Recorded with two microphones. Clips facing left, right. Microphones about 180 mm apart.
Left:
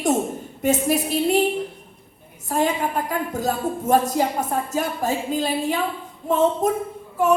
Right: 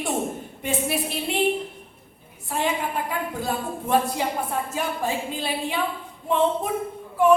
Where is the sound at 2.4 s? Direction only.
40° left (ahead or behind).